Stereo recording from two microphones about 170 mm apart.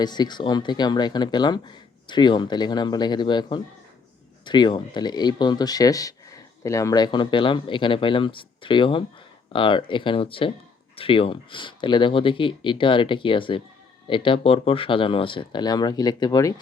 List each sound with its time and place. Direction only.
0.0 s speech: 25° left (ahead or behind)